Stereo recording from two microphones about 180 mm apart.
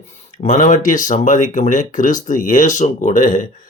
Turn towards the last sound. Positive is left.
turn(degrees=45)  # may be behind; listen again after turning